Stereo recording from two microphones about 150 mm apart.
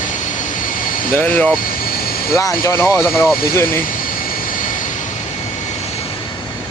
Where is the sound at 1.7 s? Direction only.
80° left.